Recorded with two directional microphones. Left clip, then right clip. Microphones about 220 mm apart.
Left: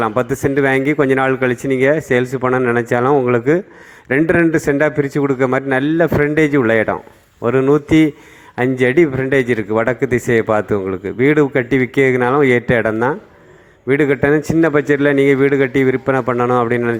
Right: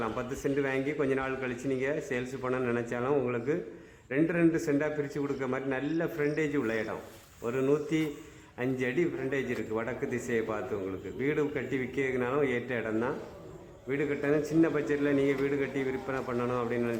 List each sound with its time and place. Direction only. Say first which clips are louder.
0.0 s a man's voice: left 17 dB; 35° left (ahead or behind)